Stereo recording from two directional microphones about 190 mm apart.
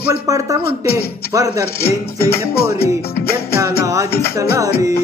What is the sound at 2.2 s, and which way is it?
Speech, 55° left (ahead or behind).